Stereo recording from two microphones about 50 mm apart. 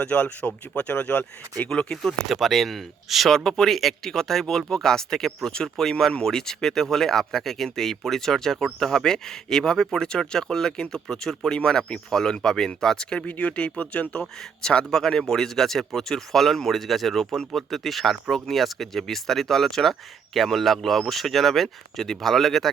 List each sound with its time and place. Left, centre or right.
0.0 s speech: left
1.7 s speech: centre
2.3 s speech: centre
3.3 s speech: centre
13.2 s speech: left; by 22.7 s centre